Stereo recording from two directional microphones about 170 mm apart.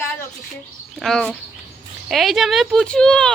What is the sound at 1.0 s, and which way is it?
Speech, 5° left (ahead or behind).